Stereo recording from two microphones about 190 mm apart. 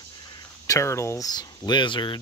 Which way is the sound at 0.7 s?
15° left (ahead or behind).